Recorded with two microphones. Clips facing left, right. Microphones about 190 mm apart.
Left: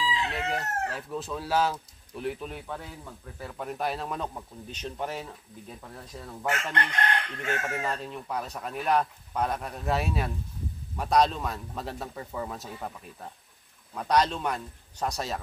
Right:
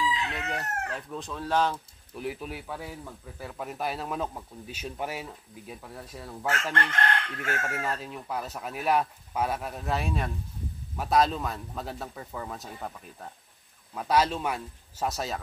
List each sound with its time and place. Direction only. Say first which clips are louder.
0.1 s chicken: left 2 dB; 30° left (ahead or behind)
0.9 s speech: left 2 dB; 5° left (ahead or behind)
6.4 s chicken: even; 20° left (ahead or behind)
7.8 s speech: even; centre (ahead or behind)